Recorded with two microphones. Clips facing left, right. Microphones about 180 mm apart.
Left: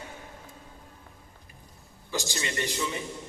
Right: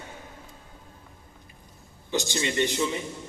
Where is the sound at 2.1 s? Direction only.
20° right (ahead or behind).